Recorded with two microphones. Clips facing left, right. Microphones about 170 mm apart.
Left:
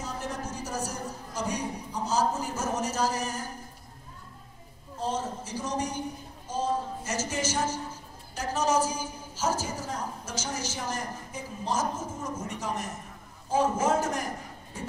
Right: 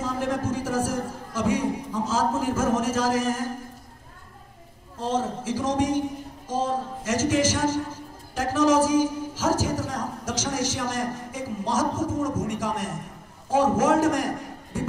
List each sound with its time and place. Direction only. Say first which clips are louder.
0.0 s music: right 9 dB; 90° right
5.0 s a man's voice: right 6 dB; 90° right